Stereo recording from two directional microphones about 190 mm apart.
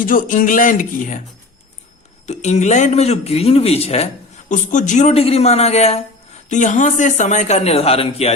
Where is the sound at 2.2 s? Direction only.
35° left (ahead or behind).